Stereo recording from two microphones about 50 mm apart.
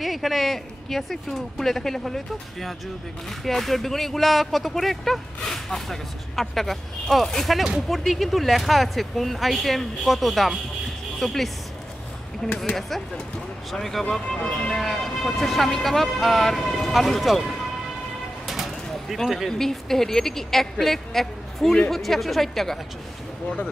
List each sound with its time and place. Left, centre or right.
0.0 s speech: centre
13.7 s speech: centre
14.3 s speech: centre
14.8 s speech: centre
18.5 s a sound: centre
19.2 s speech: centre
19.6 s speech: centre